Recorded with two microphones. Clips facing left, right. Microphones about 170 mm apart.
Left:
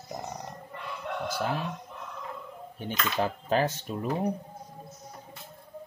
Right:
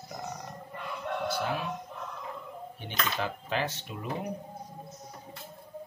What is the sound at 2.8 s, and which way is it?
Speech, 40° left (ahead or behind).